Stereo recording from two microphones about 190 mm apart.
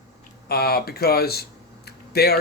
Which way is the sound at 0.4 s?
55° left (ahead or behind).